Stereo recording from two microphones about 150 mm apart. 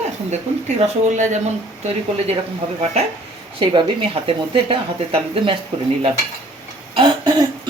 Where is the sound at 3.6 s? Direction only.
35° right (ahead or behind).